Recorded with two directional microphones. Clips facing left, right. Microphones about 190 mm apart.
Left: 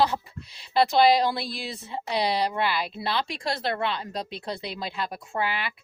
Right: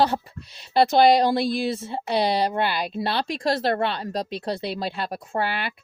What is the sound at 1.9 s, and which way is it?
A woman's voice, 35° right (ahead or behind).